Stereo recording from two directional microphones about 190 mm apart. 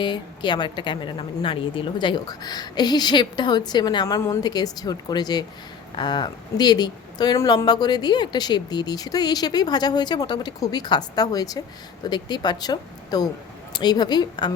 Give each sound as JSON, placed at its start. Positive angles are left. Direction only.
{"t": 0.0, "sound": "speech", "side_deg": 25}